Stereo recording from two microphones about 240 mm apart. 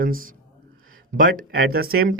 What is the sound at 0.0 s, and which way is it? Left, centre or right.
Speech, right.